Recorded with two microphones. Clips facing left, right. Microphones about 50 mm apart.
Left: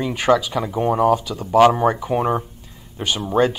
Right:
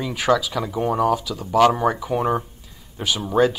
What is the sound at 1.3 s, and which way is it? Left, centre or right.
Speech, left.